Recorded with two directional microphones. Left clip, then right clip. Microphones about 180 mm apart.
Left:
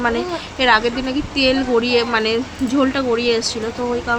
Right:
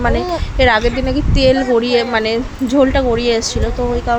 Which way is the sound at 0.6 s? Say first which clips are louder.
Right 2 dB; 20° right (ahead or behind).